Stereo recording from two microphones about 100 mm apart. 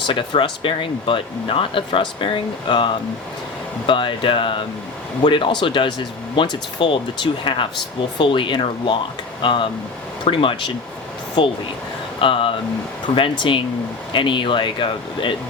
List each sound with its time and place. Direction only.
0.0 s speech: 60° left (ahead or behind)